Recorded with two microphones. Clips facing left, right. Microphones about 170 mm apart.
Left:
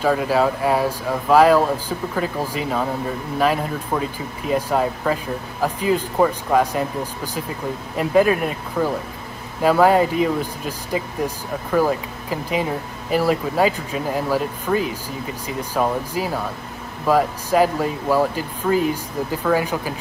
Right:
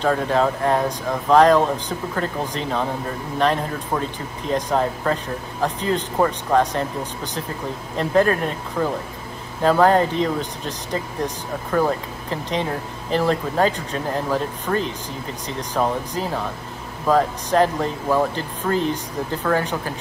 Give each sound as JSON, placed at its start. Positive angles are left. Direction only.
{"t": 0.0, "sound": "speech", "side_deg": 5}
{"t": 7.9, "sound": "speech", "side_deg": 10}